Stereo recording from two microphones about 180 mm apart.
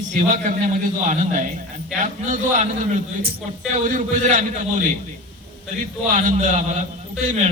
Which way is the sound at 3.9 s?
45° right (ahead or behind).